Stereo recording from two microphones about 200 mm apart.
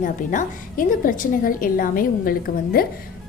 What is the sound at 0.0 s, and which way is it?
A woman's voice, 40° left (ahead or behind).